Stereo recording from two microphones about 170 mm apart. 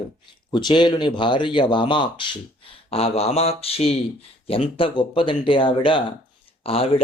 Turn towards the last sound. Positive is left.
turn(degrees=35)  # may be behind; listen again after turning